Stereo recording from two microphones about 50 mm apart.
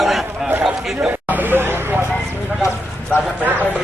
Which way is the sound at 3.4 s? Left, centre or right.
Right.